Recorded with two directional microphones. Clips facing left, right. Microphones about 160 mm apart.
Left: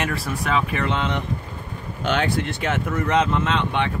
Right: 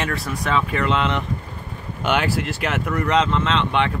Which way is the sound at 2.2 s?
5° right (ahead or behind).